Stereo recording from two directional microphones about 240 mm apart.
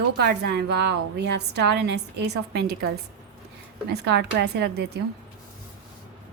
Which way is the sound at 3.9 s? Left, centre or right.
Right.